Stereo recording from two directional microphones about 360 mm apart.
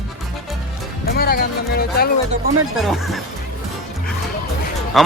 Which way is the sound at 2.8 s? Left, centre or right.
Centre.